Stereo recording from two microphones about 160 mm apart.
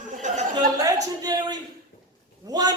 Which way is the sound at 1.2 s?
25° right (ahead or behind).